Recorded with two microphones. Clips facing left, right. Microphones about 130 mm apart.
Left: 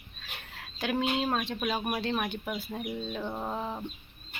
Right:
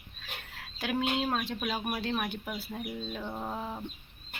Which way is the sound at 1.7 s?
15° left (ahead or behind).